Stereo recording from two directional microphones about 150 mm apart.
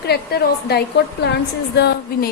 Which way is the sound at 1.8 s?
90° left.